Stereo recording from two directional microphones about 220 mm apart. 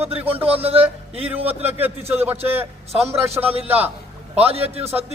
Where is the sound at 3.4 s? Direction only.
25° right (ahead or behind).